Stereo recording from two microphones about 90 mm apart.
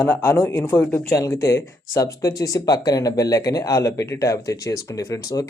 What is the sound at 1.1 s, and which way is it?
Speech, 35° left (ahead or behind).